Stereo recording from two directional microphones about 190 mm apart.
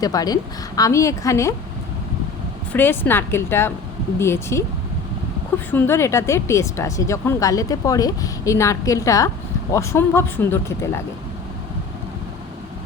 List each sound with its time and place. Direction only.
0.0 s a woman's voice: 20° left (ahead or behind)
2.7 s speech: 10° left (ahead or behind)